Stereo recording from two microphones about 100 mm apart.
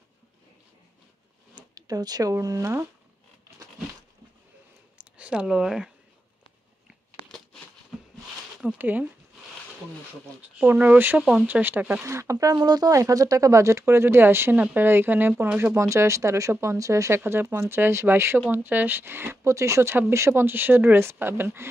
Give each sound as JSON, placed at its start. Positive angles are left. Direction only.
{"t": 1.5, "sound": "speech", "side_deg": -40}
{"t": 4.9, "sound": "a sound", "side_deg": -10}
{"t": 8.7, "sound": "speech", "side_deg": -15}
{"t": 10.6, "sound": "speech", "side_deg": -15}
{"t": 15.7, "sound": "speech", "side_deg": -30}